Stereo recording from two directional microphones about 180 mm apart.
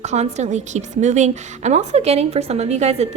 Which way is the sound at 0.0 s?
40° right (ahead or behind).